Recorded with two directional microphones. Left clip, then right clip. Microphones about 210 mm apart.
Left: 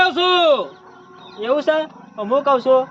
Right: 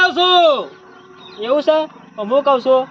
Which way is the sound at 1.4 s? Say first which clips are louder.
Right 3 dB; 15° right (ahead or behind).